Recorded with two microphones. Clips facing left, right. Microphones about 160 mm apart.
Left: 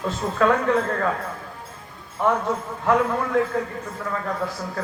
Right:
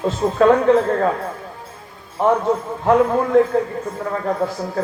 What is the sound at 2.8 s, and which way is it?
A man's voice, 30° right (ahead or behind).